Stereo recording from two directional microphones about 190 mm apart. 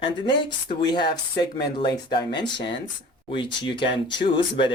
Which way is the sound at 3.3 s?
25° left (ahead or behind).